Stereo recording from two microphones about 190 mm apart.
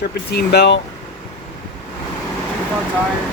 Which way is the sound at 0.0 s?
55° left (ahead or behind).